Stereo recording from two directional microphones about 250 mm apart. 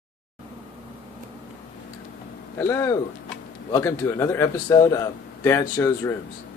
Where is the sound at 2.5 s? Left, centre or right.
Centre.